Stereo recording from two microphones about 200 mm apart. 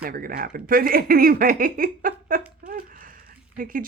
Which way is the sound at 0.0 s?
45° right (ahead or behind).